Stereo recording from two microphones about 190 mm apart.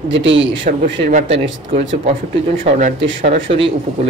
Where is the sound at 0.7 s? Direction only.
45° right (ahead or behind).